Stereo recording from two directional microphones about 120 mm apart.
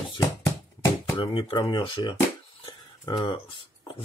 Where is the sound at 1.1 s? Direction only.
45° left (ahead or behind).